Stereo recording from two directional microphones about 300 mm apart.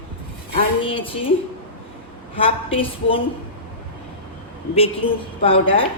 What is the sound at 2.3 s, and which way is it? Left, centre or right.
Speech, centre.